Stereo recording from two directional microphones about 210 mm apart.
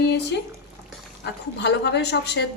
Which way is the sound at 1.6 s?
55° left (ahead or behind).